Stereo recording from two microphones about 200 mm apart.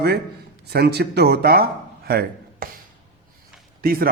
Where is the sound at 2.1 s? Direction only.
50° right (ahead or behind).